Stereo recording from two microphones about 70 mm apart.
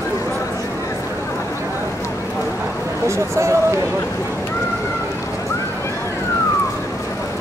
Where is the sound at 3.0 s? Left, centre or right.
Right.